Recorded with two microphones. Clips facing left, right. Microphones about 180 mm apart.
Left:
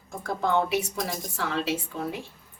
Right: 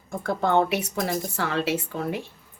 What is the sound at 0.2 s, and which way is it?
A woman's voice, 65° right (ahead or behind).